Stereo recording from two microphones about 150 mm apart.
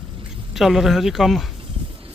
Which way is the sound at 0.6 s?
Centre (ahead or behind).